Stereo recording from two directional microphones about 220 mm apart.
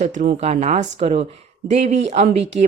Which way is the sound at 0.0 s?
35° right (ahead or behind).